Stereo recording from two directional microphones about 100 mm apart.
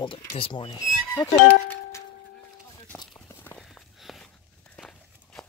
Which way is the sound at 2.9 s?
15° left (ahead or behind).